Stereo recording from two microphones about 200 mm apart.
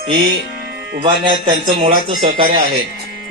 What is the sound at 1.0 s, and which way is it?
A man's voice, 25° right (ahead or behind).